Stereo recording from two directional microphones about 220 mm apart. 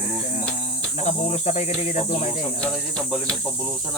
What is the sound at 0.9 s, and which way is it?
Cricket, 30° left (ahead or behind).